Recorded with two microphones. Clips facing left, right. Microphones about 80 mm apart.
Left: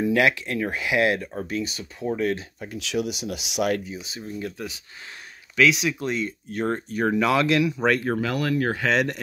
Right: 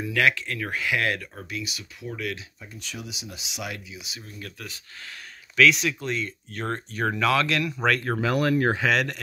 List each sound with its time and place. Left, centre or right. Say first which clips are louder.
0.0 s speech: left 3 dB; left
1.3 s speech: left 7 dB; left
2.6 s speech: left 12 dB; left
4.4 s speech: left 8 dB; left
5.6 s speech: even; centre
8.2 s speech: right 2 dB; right
8.8 s speech: left 1 dB; centre